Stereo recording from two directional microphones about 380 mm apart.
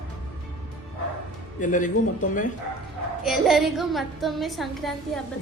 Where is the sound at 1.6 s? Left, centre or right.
Centre.